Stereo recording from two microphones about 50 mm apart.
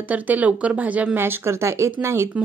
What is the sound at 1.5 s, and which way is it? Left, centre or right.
Speech, right.